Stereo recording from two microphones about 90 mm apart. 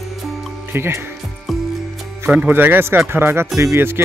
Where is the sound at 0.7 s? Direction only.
25° right (ahead or behind).